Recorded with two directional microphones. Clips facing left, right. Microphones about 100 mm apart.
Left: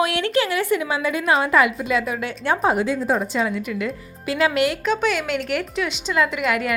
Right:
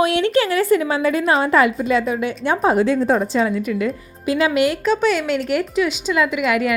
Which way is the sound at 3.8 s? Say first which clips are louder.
Right 4 dB; 25° right (ahead or behind).